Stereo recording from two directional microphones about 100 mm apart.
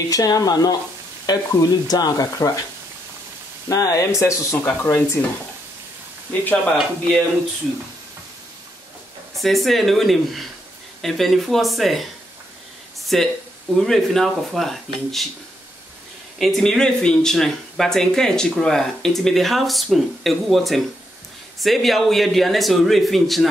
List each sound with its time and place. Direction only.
0.1 s speech: 40° left (ahead or behind)
3.6 s speech: 35° left (ahead or behind)
6.6 s speech: 10° left (ahead or behind)
9.3 s speech: centre (ahead or behind)
13.0 s a sound: centre (ahead or behind)
13.7 s speech: 5° left (ahead or behind)
16.3 s speech: centre (ahead or behind)